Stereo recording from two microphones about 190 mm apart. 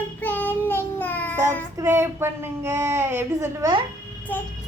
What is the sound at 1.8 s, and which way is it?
Speech, 15° right (ahead or behind).